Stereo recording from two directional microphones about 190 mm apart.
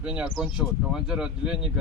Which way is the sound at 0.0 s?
5° right (ahead or behind).